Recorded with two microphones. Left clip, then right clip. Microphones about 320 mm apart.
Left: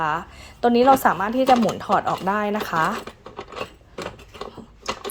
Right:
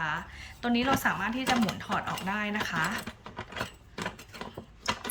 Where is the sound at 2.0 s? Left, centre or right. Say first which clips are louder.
Left 9 dB; left.